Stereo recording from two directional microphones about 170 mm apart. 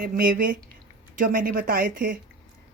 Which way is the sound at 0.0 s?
60° right (ahead or behind).